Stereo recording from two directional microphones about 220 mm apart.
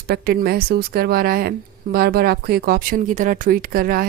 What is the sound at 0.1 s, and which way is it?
A woman's voice, 45° right (ahead or behind).